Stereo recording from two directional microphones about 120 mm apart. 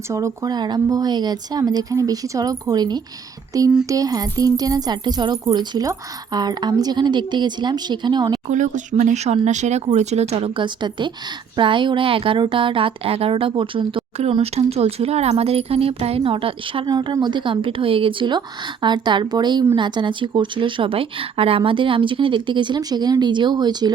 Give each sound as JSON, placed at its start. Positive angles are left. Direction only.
{"t": 0.1, "sound": "speech", "side_deg": -25}
{"t": 8.4, "sound": "speech", "side_deg": -90}
{"t": 14.4, "sound": "speech", "side_deg": -60}